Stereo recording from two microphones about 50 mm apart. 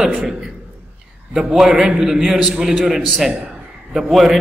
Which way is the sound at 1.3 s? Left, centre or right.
Centre.